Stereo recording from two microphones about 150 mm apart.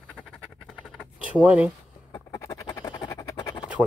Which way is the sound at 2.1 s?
20° left (ahead or behind).